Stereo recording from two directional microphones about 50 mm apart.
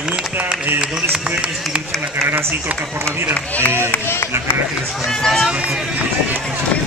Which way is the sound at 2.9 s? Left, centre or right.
Right.